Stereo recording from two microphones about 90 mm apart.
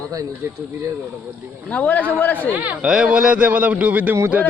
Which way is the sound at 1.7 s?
20° left (ahead or behind).